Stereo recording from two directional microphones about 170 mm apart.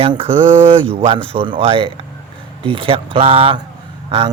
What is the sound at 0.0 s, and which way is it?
Speech, 35° right (ahead or behind).